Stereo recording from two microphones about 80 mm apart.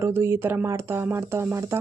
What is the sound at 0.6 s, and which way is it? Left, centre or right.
Speech, right.